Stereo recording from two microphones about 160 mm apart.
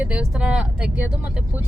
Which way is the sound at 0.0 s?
5° right (ahead or behind).